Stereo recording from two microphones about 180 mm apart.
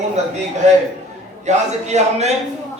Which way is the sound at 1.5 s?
40° right (ahead or behind).